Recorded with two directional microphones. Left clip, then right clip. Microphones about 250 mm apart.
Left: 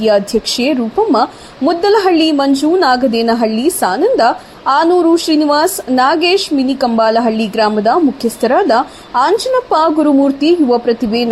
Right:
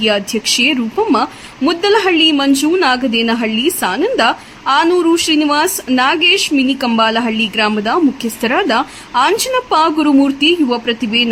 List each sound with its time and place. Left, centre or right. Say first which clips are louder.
0.0 s a woman's voice: left 3 dB; centre